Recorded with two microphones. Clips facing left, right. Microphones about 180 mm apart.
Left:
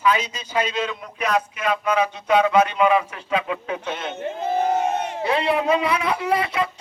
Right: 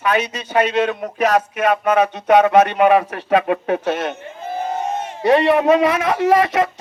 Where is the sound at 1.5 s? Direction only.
65° right (ahead or behind).